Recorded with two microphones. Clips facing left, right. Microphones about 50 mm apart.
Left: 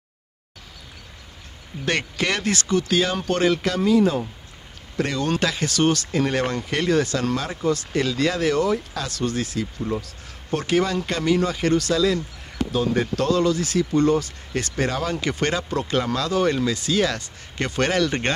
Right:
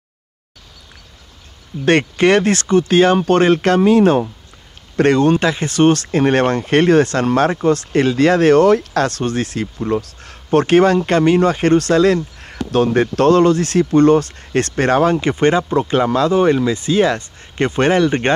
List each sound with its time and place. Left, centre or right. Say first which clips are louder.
1.9 s speech: right 11 dB; right
5.3 s speech: right 7 dB; right